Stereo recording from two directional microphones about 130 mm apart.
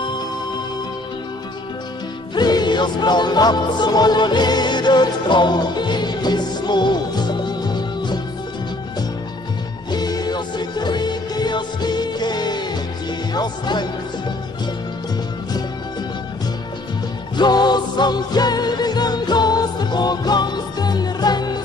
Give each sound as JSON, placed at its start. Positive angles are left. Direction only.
{"t": 2.3, "sound": "music", "side_deg": 35}
{"t": 9.8, "sound": "music", "side_deg": 30}
{"t": 13.3, "sound": "speech", "side_deg": 35}
{"t": 17.4, "sound": "music", "side_deg": 35}